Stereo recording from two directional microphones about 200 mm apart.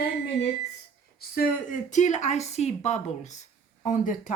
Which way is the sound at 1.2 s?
45° left (ahead or behind).